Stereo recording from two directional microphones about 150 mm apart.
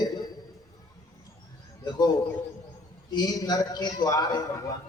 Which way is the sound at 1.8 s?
25° left (ahead or behind).